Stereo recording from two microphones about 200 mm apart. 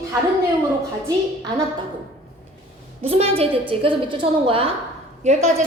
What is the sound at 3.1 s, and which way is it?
A woman's voice, 30° right (ahead or behind).